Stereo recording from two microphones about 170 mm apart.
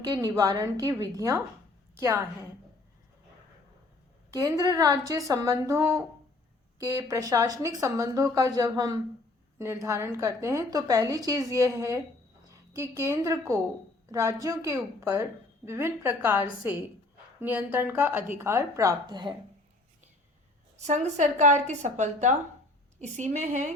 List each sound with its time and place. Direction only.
0.0 s a woman's voice: 20° right (ahead or behind)
4.4 s a woman's voice: 20° right (ahead or behind)
20.7 s a woman's voice: 45° right (ahead or behind)